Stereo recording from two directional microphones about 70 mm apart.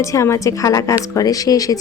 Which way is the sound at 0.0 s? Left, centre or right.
Left.